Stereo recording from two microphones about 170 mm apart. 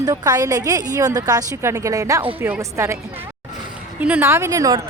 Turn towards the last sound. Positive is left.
turn(degrees=-20)  # may be behind; listen again after turning